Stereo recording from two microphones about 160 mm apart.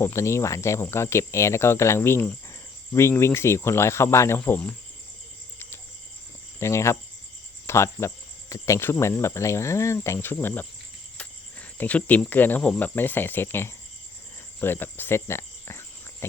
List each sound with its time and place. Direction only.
0.0 s speech: 15° left (ahead or behind)
6.6 s speech: 15° left (ahead or behind)
14.6 s cricket: 15° left (ahead or behind)